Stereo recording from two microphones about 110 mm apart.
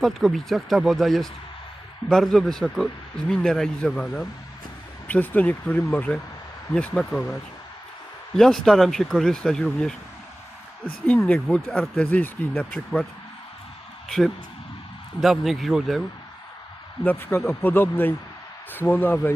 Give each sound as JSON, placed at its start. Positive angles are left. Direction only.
{"t": 0.0, "sound": "speech", "side_deg": 0}
{"t": 8.4, "sound": "speech", "side_deg": 5}
{"t": 15.2, "sound": "speech", "side_deg": 0}
{"t": 17.0, "sound": "a man's voice", "side_deg": 15}